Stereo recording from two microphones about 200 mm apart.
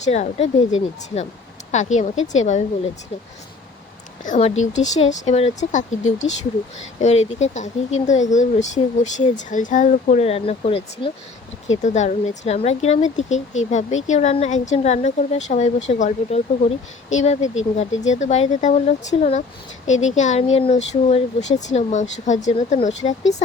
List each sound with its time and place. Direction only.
0.0 s speech: 35° left (ahead or behind)
1.7 s speech: 35° left (ahead or behind)
4.2 s speech: 35° left (ahead or behind)